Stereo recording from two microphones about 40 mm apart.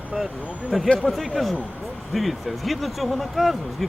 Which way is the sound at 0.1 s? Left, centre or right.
Centre.